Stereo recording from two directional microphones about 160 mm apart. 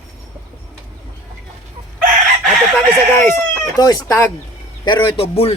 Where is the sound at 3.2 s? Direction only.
20° left (ahead or behind).